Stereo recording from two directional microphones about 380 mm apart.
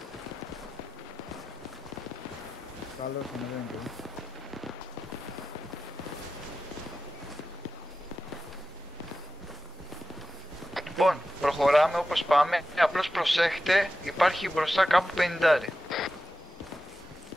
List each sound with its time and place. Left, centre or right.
3.0 s speech: centre
10.7 s a man's voice: centre